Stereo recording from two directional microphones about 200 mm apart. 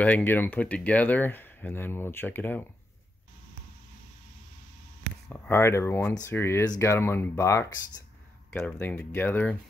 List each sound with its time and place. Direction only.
0.0 s speech: 10° left (ahead or behind)
5.3 s speech: 10° left (ahead or behind)